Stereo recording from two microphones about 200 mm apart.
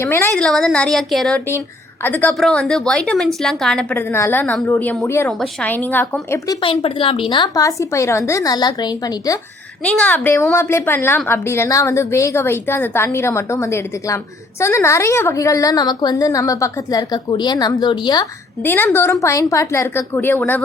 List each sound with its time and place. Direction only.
0.0 s a woman's voice: 10° left (ahead or behind)
6.6 s a woman's voice: 25° left (ahead or behind)
18.6 s a woman's voice: 10° left (ahead or behind)